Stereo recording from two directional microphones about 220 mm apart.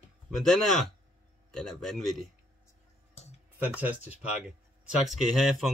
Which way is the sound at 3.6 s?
5° right (ahead or behind).